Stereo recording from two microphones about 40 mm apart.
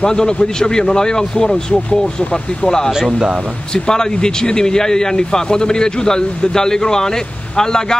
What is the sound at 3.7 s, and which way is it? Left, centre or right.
Speech, centre.